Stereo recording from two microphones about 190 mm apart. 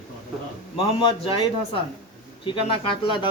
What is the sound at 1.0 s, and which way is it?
Speech, 25° left (ahead or behind).